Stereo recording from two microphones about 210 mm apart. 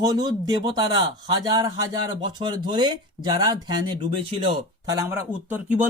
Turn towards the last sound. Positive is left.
turn(degrees=-5)  # may be behind; listen again after turning